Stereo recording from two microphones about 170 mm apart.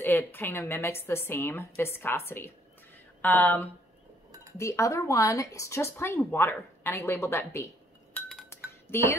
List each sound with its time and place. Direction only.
0.0 s speech: 10° left (ahead or behind)
8.1 s chink: centre (ahead or behind)
8.5 s dishes: 15° left (ahead or behind)